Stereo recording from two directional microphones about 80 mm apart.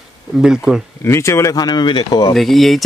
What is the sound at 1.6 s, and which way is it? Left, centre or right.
Speech, left.